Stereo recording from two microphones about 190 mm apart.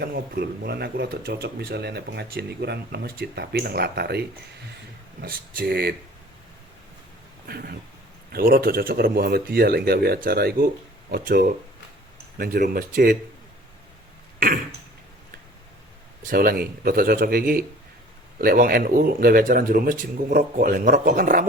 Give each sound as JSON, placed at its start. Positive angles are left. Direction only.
{"t": 0.0, "sound": "speech", "side_deg": -55}
{"t": 5.2, "sound": "speech", "side_deg": -50}
{"t": 7.4, "sound": "speech", "side_deg": -55}
{"t": 14.3, "sound": "throat clearing", "side_deg": -45}
{"t": 16.3, "sound": "speech", "side_deg": -50}